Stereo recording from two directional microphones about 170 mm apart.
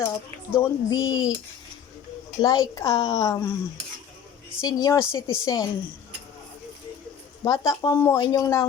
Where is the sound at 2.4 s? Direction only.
20° left (ahead or behind).